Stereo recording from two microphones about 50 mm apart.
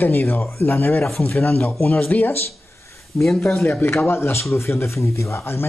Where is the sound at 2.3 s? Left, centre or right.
Left.